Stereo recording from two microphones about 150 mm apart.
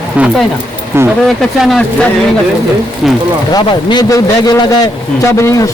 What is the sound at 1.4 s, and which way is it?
Speech, centre (ahead or behind).